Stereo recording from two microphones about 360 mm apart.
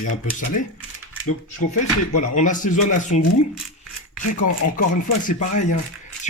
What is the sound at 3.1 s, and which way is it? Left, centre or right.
Speech, left.